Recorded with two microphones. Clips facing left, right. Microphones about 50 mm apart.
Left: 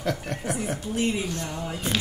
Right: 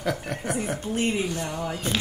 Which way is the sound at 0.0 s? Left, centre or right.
Centre.